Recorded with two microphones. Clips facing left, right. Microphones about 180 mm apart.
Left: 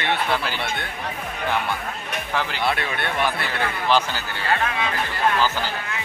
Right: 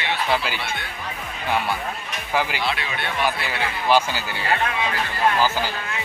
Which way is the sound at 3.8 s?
10° right (ahead or behind).